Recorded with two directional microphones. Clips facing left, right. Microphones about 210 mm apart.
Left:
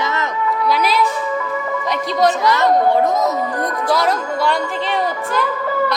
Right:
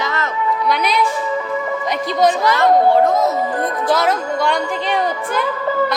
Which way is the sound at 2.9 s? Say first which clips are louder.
Right 2 dB; 20° left (ahead or behind).